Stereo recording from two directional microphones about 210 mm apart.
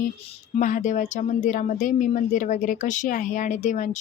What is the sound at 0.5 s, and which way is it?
Speech, 35° left (ahead or behind).